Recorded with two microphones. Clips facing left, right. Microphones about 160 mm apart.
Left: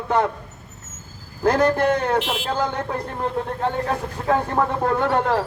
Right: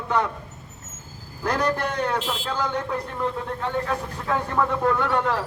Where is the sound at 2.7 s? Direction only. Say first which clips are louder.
Left 1 dB; 30° left (ahead or behind).